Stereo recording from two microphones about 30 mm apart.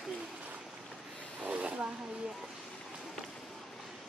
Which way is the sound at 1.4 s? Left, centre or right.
Right.